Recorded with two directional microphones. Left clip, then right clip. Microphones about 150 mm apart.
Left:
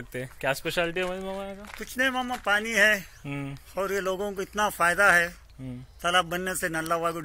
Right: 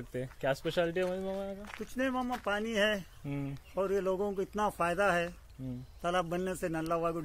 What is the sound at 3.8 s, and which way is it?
Speech, 25° right (ahead or behind).